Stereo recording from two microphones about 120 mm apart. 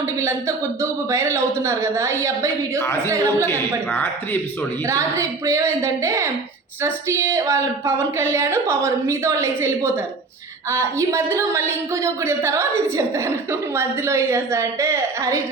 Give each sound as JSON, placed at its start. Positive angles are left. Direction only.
{"t": 0.2, "sound": "a woman's voice", "side_deg": -25}
{"t": 2.7, "sound": "speech", "side_deg": 20}
{"t": 3.1, "sound": "a woman's voice", "side_deg": -25}
{"t": 3.4, "sound": "a woman's voice", "side_deg": 20}
{"t": 4.9, "sound": "a woman's voice", "side_deg": -25}